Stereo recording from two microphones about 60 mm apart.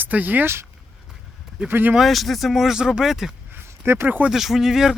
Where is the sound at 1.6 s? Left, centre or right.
Right.